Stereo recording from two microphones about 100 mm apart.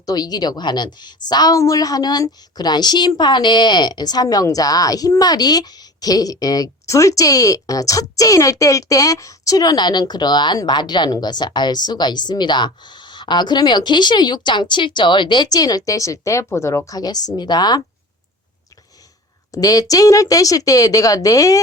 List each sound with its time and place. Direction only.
0.0 s a woman's voice: 40° left (ahead or behind)
19.5 s a woman's voice: 35° left (ahead or behind)